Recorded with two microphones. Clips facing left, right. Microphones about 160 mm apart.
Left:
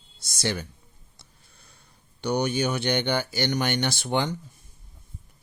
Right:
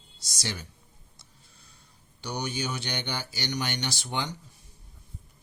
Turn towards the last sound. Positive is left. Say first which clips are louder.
# left 7 dB
turn(degrees=55)  # may be behind; listen again after turning